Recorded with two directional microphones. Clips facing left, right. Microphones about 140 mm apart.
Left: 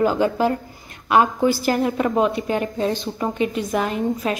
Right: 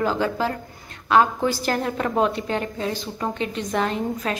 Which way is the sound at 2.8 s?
20° left (ahead or behind).